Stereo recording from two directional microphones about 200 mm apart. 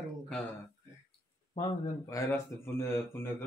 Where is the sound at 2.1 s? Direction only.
10° left (ahead or behind).